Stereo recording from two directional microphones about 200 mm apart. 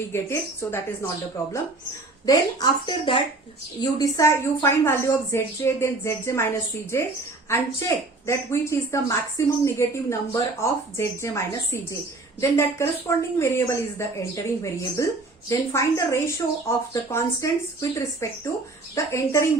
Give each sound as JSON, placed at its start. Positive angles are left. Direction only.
{"t": 0.1, "sound": "a woman's voice", "side_deg": 15}
{"t": 7.5, "sound": "a woman's voice", "side_deg": 15}